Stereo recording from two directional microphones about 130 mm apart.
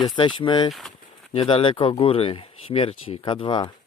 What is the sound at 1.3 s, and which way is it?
Speech, 45° left (ahead or behind).